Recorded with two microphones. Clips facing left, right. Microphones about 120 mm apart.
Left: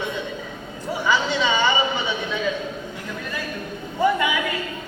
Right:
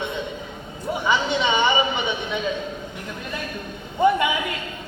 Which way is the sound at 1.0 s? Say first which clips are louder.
Even; 20° right (ahead or behind).